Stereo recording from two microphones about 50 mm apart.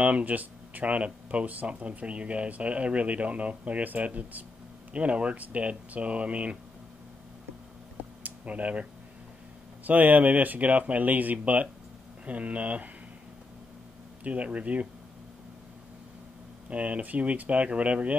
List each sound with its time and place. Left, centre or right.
0.0 s speech: right
8.2 s a sound: right
9.8 s speech: right
14.2 s speech: right
16.6 s speech: right